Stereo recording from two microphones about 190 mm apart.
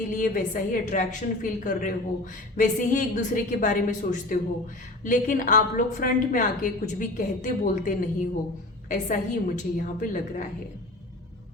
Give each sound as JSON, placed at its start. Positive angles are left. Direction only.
{"t": 0.2, "sound": "a woman's voice", "side_deg": 45}